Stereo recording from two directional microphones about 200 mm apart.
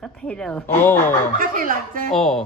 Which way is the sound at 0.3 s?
5° left (ahead or behind).